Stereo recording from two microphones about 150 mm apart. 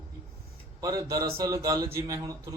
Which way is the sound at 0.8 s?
20° right (ahead or behind).